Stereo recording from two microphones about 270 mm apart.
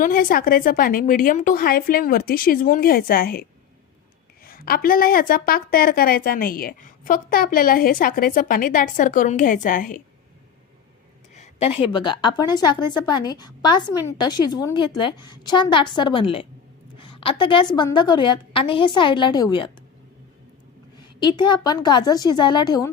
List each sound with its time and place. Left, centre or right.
0.0 s a woman's voice: left
4.4 s a woman's voice: left
11.3 s a woman's voice: left
21.2 s a woman's voice: centre